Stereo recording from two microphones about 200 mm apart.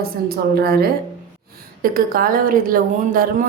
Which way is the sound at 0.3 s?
50° right (ahead or behind).